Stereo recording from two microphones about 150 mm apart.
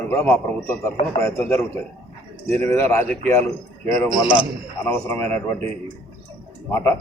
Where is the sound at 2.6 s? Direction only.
15° left (ahead or behind).